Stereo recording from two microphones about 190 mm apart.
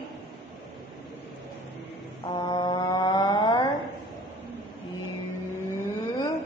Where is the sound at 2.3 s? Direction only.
25° left (ahead or behind).